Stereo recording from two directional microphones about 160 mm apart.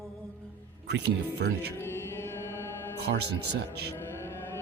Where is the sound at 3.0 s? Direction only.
90° right.